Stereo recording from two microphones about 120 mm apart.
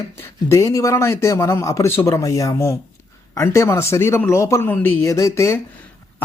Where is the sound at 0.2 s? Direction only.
25° left (ahead or behind).